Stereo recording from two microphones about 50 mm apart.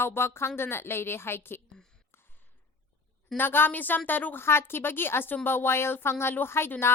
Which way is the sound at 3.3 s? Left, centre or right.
Left.